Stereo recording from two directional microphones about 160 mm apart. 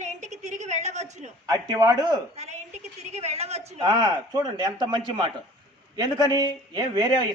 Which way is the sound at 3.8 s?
25° right (ahead or behind).